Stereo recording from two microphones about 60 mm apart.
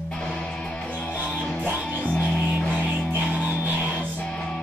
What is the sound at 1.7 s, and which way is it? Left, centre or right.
Music, right.